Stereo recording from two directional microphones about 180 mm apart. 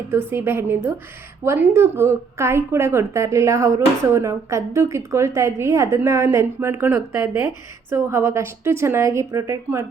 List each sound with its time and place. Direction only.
0.1 s a woman's voice: 10° right (ahead or behind)